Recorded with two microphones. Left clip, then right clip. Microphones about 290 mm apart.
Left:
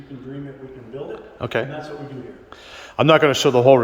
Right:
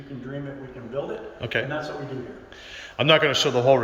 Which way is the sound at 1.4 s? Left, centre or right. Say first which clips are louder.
Left 3 dB; centre.